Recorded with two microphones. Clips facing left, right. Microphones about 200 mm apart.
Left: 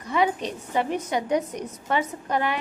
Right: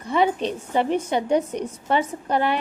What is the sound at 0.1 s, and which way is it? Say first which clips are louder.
A woman's voice: right 3 dB; 30° right (ahead or behind).